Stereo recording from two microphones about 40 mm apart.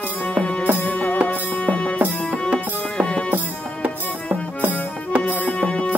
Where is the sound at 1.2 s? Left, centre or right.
Left.